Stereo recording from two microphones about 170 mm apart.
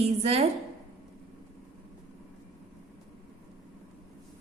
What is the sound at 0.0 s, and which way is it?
Speech, 35° right (ahead or behind).